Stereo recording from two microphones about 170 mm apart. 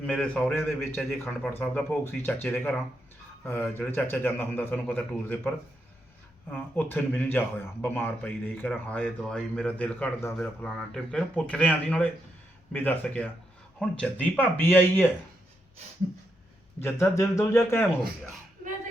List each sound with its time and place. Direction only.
0.0 s speech: 5° left (ahead or behind)
6.5 s speech: 10° left (ahead or behind)
16.8 s speech: 15° left (ahead or behind)